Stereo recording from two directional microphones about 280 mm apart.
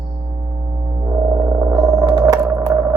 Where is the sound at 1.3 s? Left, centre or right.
Centre.